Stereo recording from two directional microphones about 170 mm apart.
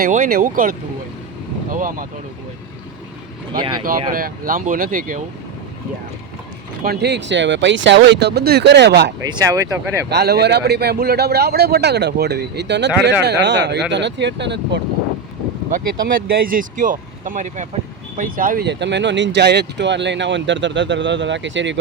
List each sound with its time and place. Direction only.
0.0 s speech: 55° right (ahead or behind)
3.6 s speech: 25° right (ahead or behind)
4.1 s speech: 55° right (ahead or behind)
6.8 s speech: 80° right
9.2 s speech: 20° right (ahead or behind)
10.1 s a man's voice: 75° right (ahead or behind); by 14.8 s 90° right
15.7 s speech: 55° right (ahead or behind)
18.6 s speech: 90° right